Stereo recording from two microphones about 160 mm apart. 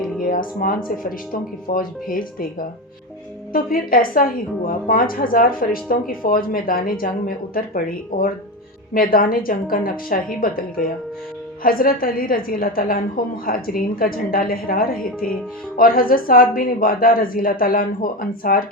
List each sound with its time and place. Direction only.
0.3 s a woman's voice: 60° left (ahead or behind)
11.6 s a woman's voice: 65° left (ahead or behind)